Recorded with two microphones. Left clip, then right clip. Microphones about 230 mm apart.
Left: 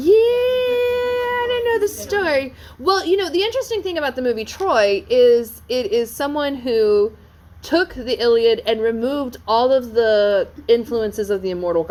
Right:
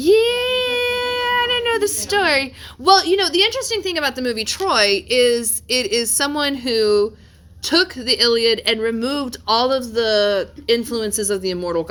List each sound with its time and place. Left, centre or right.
0.0 s speech: right